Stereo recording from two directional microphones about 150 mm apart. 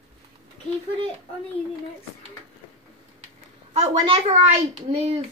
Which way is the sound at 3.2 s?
45° right (ahead or behind).